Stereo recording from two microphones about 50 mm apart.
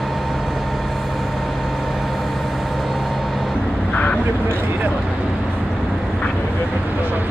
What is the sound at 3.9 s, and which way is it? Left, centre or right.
Vehicle, left.